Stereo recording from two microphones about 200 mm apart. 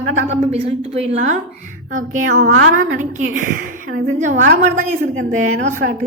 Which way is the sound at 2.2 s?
80° right.